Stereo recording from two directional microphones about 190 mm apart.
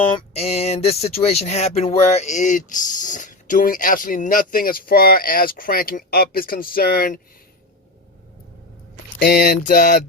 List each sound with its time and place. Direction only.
0.3 s speech: 35° left (ahead or behind); by 7.2 s 50° left (ahead or behind)
9.1 s speech: 55° left (ahead or behind)